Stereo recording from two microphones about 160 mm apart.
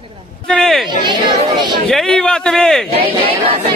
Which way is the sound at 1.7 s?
5° left (ahead or behind).